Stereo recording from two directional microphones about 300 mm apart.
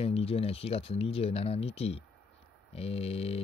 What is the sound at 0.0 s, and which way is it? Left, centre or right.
Speech, centre.